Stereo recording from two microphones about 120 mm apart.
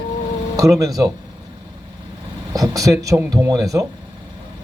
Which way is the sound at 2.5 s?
30° right (ahead or behind).